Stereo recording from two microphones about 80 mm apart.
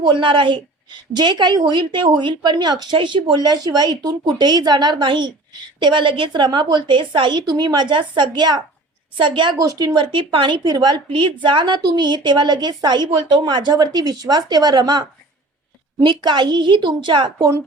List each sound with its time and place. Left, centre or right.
0.0 s a woman's voice: right
9.1 s a woman's voice: right
9.6 s a woman's voice: right
16.0 s a woman's voice: right